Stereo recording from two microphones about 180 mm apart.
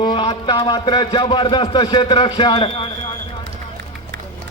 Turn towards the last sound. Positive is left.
turn(degrees=25)  # may be behind; listen again after turning